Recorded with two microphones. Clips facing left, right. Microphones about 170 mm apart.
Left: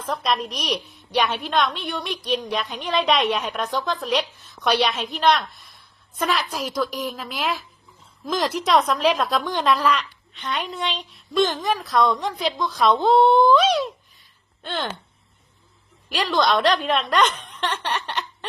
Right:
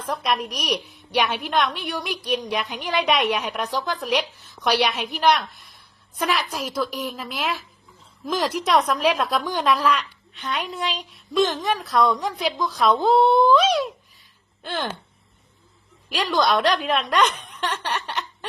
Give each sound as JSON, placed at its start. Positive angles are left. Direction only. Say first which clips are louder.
{"t": 0.0, "sound": "a woman's voice", "louder": "left 1 dB", "side_deg": 0}
{"t": 3.2, "sound": "a woman's voice", "louder": "even", "side_deg": 0}
{"t": 3.4, "sound": "a woman's voice", "louder": "left 1 dB", "side_deg": -15}
{"t": 4.0, "sound": "a woman's voice", "louder": "right 1 dB", "side_deg": 0}
{"t": 4.4, "sound": "a woman's voice", "louder": "even", "side_deg": -15}
{"t": 5.7, "sound": "a sound", "louder": "even", "side_deg": 0}
{"t": 6.3, "sound": "a woman's voice", "louder": "left 1 dB", "side_deg": -5}
{"t": 14.6, "sound": "a sound", "louder": "even", "side_deg": -10}
{"t": 16.0, "sound": "a woman's voice", "louder": "even", "side_deg": 0}